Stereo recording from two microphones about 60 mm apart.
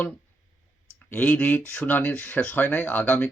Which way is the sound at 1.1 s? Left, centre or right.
Left.